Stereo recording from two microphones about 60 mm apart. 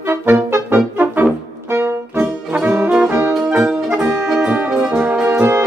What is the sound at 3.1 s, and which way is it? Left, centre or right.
Music, right.